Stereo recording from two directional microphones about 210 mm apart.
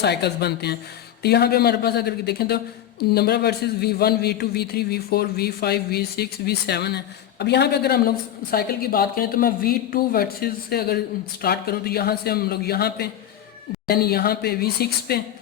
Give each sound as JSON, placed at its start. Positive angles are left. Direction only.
{"t": 0.0, "sound": "a man's voice", "side_deg": 50}